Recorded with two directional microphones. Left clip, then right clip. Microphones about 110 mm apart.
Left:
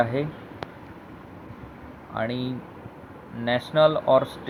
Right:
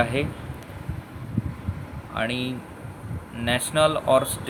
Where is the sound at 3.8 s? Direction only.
35° right (ahead or behind).